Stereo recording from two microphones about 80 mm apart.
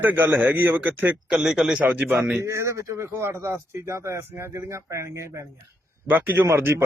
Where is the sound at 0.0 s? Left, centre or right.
Right.